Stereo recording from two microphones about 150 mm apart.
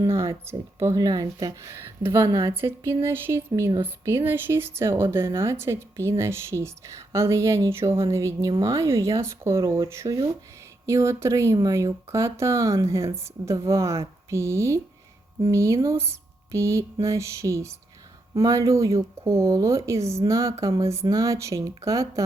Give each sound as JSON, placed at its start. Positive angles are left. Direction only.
{"t": 0.0, "sound": "speech", "side_deg": -20}